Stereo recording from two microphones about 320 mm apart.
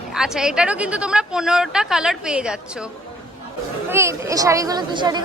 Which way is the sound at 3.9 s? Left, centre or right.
Centre.